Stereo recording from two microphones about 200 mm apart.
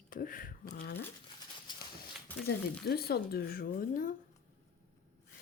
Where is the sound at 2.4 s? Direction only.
50° left (ahead or behind).